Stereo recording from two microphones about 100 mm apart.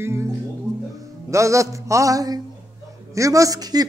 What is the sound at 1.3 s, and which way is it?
A man's voice, 30° right (ahead or behind).